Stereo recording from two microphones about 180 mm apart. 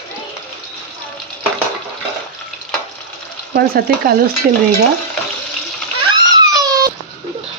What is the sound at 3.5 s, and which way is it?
Stir, 55° right (ahead or behind).